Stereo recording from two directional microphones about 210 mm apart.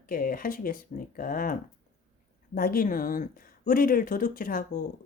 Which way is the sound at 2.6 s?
45° left (ahead or behind).